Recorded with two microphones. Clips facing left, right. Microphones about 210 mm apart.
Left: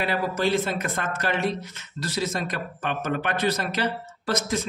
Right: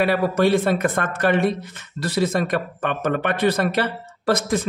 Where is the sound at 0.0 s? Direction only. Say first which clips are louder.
Right 7 dB; 55° right (ahead or behind).